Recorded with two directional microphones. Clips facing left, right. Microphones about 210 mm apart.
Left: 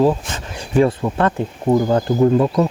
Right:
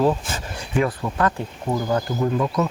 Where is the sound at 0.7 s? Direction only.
30° left (ahead or behind).